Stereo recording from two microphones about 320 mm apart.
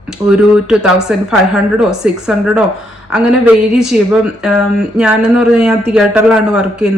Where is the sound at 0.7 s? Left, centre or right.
Centre.